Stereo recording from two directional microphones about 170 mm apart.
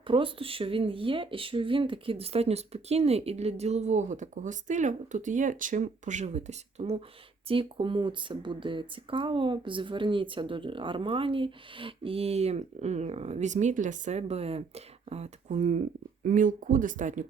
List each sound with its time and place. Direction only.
0.1 s speech: 30° right (ahead or behind); by 17.2 s 50° right (ahead or behind)